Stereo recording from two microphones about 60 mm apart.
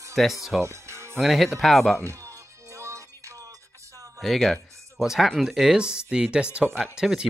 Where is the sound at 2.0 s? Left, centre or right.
Right.